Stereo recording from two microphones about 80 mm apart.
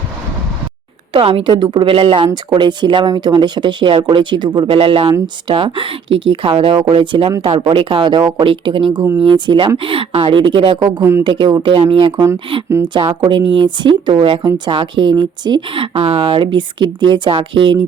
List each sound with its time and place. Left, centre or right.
1.1 s a woman's voice: right
11.2 s a woman's voice: right
12.8 s a woman's voice: right